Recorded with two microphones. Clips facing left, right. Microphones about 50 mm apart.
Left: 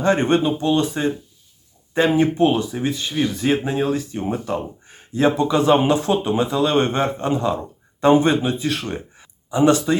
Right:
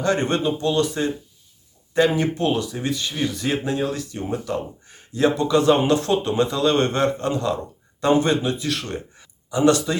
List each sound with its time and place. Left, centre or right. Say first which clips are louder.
0.0 s speech: left 4 dB; left